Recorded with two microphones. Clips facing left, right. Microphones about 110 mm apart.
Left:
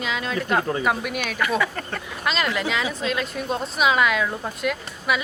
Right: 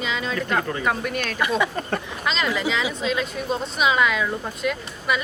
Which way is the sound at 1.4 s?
20° right (ahead or behind).